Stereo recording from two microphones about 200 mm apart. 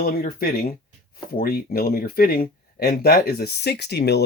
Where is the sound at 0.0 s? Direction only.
45° left (ahead or behind).